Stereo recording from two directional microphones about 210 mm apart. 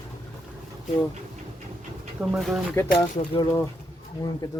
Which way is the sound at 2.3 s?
Centre (ahead or behind).